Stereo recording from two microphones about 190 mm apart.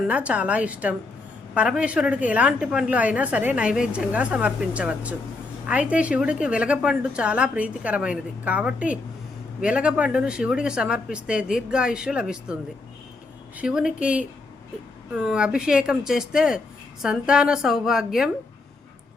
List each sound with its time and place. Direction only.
0.1 s a woman's voice: 5° right (ahead or behind)
13.6 s speech: 5° right (ahead or behind)